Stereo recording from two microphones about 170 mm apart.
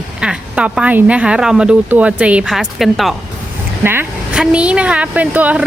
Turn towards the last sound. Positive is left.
turn(degrees=-10)  # may be behind; listen again after turning